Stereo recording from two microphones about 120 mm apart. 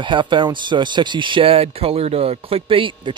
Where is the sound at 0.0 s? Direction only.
40° right (ahead or behind).